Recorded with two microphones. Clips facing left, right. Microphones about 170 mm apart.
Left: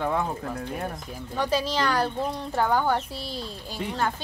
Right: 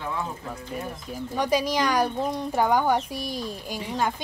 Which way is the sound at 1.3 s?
15° right (ahead or behind).